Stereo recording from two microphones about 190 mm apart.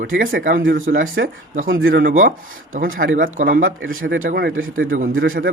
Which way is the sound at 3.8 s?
90° right.